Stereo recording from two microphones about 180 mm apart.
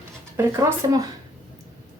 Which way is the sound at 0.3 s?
15° right (ahead or behind).